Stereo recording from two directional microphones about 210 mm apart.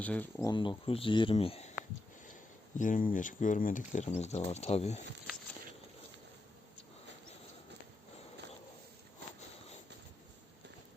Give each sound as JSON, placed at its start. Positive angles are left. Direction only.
{"t": 0.0, "sound": "speech", "side_deg": 5}
{"t": 0.5, "sound": "speech", "side_deg": 25}
{"t": 2.7, "sound": "speech", "side_deg": 40}